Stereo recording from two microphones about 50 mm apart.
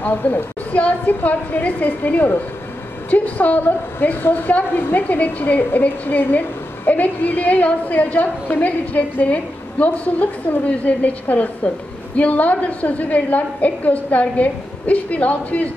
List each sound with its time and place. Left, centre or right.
0.0 s a woman's voice: left